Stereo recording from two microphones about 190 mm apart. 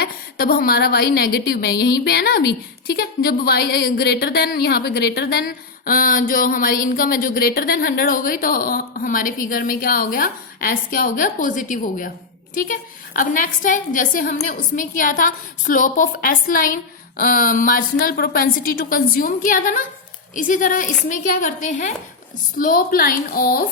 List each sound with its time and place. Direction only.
0.0 s a woman's voice: 50° left (ahead or behind)